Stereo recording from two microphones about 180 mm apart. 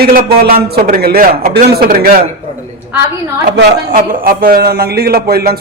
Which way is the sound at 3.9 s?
50° right (ahead or behind).